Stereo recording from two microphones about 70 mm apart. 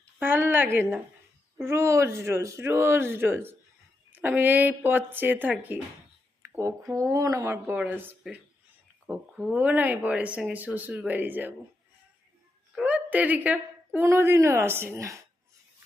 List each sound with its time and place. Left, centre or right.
0.2 s speech: right
6.4 s a sound: right
6.9 s speech: right
7.7 s speech: right
8.2 s speech: centre; by 11.5 s right
12.8 s speech: right
14.0 s speech: right